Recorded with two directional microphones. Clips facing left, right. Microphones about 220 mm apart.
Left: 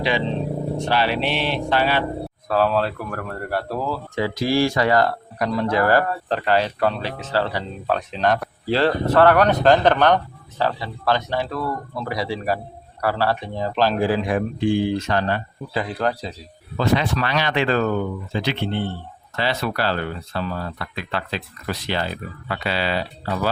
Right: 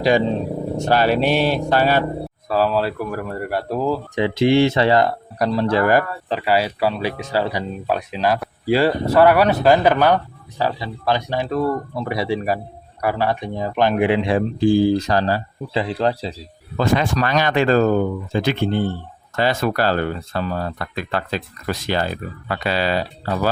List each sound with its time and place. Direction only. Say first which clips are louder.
0.8 s speech: right 6 dB; 45° right (ahead or behind)
2.5 s speech: right 1 dB; centre (ahead or behind); by 5.8 s 30° right (ahead or behind)
5.8 s speech: even; 15° right (ahead or behind)
6.2 s speech: right 1 dB; 5° right (ahead or behind)
11.5 s a man's voice: right 6 dB; 25° right (ahead or behind)
16.7 s speech: right 2 dB; 45° right (ahead or behind)